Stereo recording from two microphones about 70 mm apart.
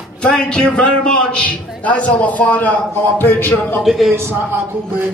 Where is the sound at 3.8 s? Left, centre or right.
Centre.